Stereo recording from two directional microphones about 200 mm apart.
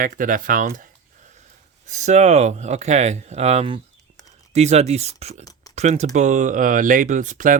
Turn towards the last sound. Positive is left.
turn(degrees=-40)  # may be behind; listen again after turning